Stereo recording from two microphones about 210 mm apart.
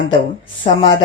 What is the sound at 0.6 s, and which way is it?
Speech, 20° left (ahead or behind).